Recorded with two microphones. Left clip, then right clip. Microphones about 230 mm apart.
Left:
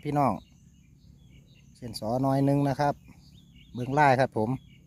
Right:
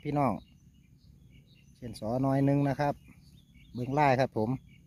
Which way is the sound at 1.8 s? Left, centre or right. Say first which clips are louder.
Left 3 dB; centre.